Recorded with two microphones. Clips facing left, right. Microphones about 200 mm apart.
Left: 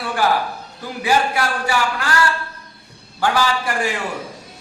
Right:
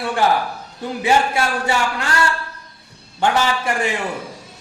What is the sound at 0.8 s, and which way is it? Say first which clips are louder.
A man's voice: right 2 dB; 25° right (ahead or behind).